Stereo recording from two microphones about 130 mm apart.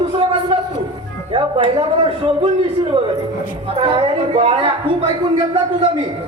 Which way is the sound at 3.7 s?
50° right (ahead or behind).